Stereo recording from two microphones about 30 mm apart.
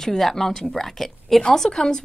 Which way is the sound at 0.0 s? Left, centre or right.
Centre.